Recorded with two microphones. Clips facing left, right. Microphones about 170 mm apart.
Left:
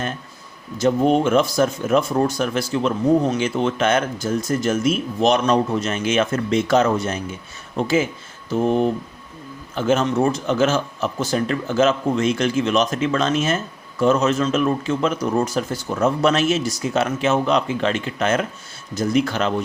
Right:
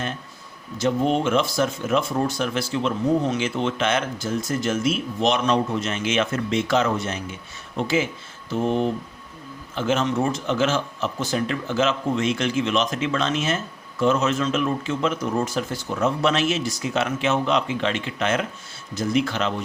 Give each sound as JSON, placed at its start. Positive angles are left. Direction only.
{"t": 0.8, "sound": "speech", "side_deg": 45}